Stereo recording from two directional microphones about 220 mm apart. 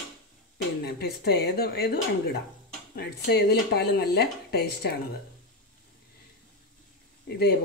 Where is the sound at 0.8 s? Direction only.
45° left (ahead or behind).